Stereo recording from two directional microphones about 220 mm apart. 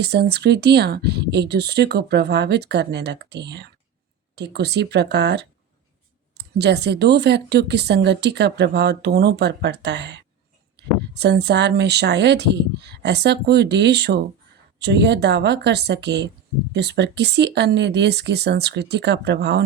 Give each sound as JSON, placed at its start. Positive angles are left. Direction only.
{"t": 0.0, "sound": "speech", "side_deg": -50}